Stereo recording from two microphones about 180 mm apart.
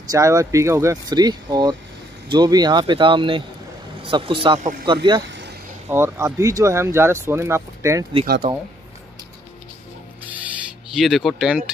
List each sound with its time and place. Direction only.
0.0 s speech: 20° right (ahead or behind)
4.6 s speech: 45° right (ahead or behind)
4.8 s speech: 25° right (ahead or behind)
5.9 s speech: 15° right (ahead or behind)
10.9 s speech: centre (ahead or behind)